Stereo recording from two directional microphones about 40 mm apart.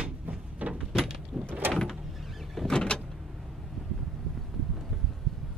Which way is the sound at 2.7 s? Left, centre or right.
Centre.